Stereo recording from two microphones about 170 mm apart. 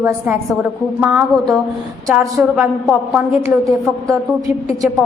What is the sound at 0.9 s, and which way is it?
A woman's voice, 10° right (ahead or behind).